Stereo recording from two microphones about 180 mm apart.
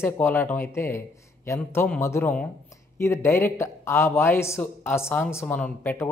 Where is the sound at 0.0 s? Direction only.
10° left (ahead or behind).